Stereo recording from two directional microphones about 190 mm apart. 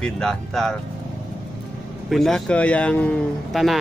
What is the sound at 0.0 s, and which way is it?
Speech, 5° left (ahead or behind).